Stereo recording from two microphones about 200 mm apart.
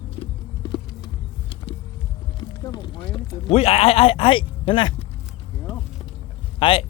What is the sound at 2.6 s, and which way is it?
Speech, 20° left (ahead or behind).